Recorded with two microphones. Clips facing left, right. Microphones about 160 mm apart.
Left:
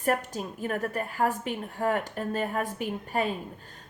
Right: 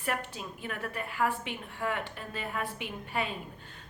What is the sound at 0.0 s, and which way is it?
Speech, 40° left (ahead or behind).